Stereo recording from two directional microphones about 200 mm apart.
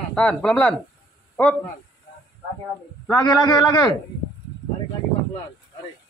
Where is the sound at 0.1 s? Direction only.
5° left (ahead or behind).